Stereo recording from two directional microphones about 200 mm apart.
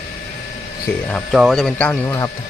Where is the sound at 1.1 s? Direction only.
Centre (ahead or behind).